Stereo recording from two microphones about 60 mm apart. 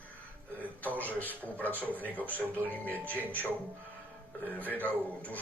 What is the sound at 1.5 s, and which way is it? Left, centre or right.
A man's voice, left.